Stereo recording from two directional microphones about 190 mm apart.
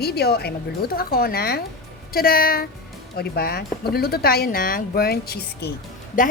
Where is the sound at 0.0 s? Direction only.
60° left (ahead or behind).